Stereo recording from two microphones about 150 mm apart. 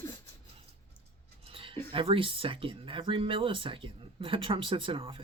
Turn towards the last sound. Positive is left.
turn(degrees=-35)  # may be behind; listen again after turning